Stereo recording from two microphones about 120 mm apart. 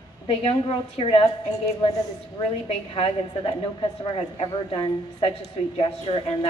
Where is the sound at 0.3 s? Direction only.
50° left (ahead or behind).